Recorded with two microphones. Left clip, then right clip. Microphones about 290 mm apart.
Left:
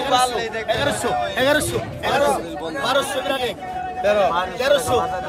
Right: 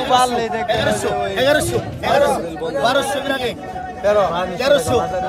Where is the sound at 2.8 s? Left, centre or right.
Centre.